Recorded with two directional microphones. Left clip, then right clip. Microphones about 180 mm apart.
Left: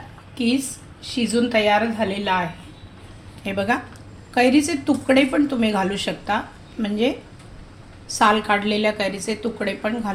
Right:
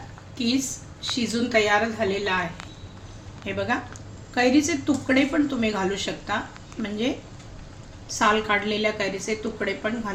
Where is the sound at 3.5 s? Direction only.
45° left (ahead or behind).